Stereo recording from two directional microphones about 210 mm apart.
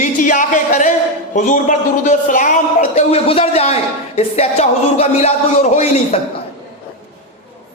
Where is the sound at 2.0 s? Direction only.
35° left (ahead or behind).